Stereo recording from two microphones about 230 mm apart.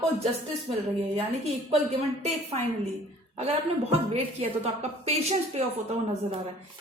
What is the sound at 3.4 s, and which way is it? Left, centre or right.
Speech, right.